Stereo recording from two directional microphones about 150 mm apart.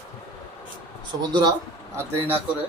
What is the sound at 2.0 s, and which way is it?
Speech, 15° right (ahead or behind).